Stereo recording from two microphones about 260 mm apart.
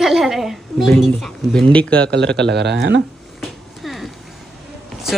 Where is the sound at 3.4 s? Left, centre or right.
Centre.